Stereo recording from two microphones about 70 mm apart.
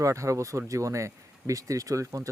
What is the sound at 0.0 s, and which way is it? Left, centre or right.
Speech, right.